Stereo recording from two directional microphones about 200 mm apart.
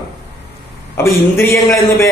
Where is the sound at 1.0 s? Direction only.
15° left (ahead or behind).